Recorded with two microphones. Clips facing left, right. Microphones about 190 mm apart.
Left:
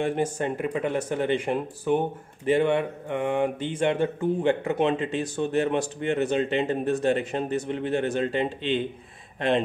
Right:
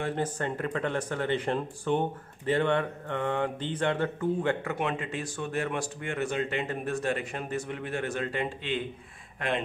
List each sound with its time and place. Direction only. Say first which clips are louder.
0.0 s speech: left 5 dB; 15° left (ahead or behind)